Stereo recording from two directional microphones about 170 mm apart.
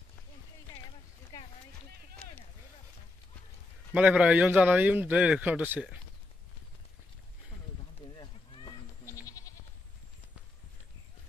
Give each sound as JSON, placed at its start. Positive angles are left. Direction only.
{"t": 3.9, "sound": "a man's voice", "side_deg": -5}
{"t": 8.2, "sound": "goat", "side_deg": 25}